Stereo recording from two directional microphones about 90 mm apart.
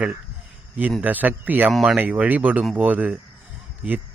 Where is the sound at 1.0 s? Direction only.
20° right (ahead or behind).